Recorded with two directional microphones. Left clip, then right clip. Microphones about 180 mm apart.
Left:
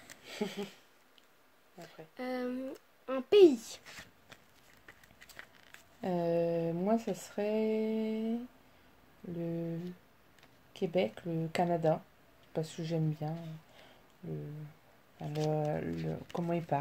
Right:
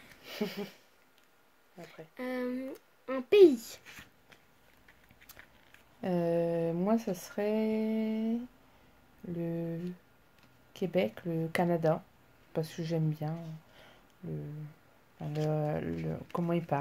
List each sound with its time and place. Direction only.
0.2 s a sound: 15° right (ahead or behind)
2.1 s a child's voice: 20° left (ahead or behind)
5.9 s speech: 15° right (ahead or behind)
9.4 s speech: 15° right (ahead or behind)
15.1 s speech: 15° right (ahead or behind)